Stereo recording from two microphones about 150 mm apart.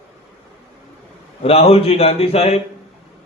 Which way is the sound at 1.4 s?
40° left (ahead or behind).